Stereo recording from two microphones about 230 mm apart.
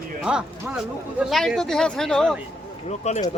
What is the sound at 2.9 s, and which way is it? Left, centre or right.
Speech, left.